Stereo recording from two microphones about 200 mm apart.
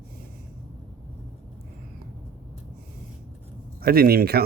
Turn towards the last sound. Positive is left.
turn(degrees=-50)  # may be behind; listen again after turning